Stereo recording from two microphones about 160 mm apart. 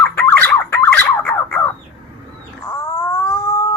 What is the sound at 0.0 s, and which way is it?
Fowl, 10° left (ahead or behind).